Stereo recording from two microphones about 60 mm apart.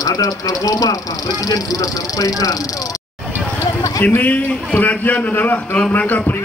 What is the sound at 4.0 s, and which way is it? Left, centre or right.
A man's voice, left.